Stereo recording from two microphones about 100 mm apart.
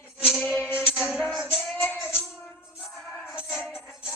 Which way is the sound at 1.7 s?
15° left (ahead or behind).